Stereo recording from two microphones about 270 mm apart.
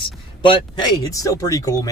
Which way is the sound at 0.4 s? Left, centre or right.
Centre.